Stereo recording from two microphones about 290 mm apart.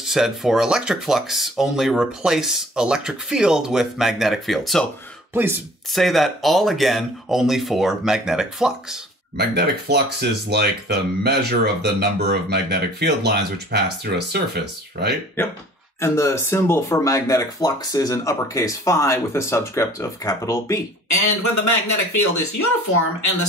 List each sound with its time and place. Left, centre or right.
0.0 s speech: centre
9.4 s speech: right
15.4 s speech: centre
21.1 s speech: left